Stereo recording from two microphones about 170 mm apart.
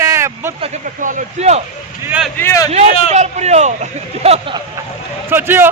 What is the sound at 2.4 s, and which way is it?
Speech, 15° left (ahead or behind).